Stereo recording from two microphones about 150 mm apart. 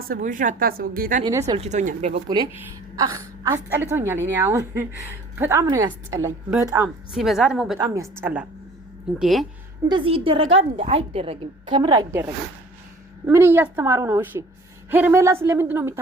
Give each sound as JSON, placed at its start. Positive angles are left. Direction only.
{"t": 0.2, "sound": "a woman's voice", "side_deg": -60}
{"t": 1.2, "sound": "a woman's voice", "side_deg": -25}
{"t": 1.5, "sound": "speech", "side_deg": -50}
{"t": 2.5, "sound": "a woman's voice", "side_deg": -25}
{"t": 7.1, "sound": "a woman's voice", "side_deg": 0}
{"t": 7.8, "sound": "a woman's voice", "side_deg": -30}
{"t": 8.2, "sound": "a woman's voice", "side_deg": -10}
{"t": 9.9, "sound": "a woman's voice", "side_deg": -35}
{"t": 13.2, "sound": "a woman's voice", "side_deg": -15}